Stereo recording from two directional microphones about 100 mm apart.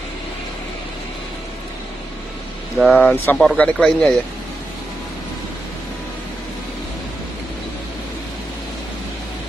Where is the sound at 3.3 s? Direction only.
5° left (ahead or behind).